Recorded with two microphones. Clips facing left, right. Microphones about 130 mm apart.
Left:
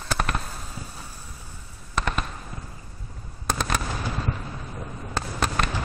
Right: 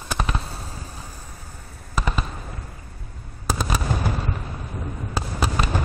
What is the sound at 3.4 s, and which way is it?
Fireworks, 5° right (ahead or behind).